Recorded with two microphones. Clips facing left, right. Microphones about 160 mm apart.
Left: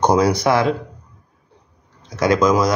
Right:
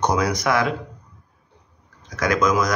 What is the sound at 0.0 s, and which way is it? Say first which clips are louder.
Speech: left 6 dB; 30° left (ahead or behind).